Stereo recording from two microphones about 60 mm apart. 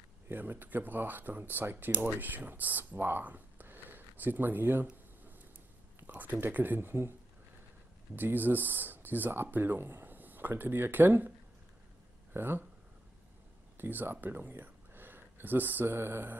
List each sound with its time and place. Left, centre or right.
0.3 s speech: right
5.9 s a sound: right
6.4 s speech: right
8.2 s speech: right
12.4 s speech: right
13.7 s speech: right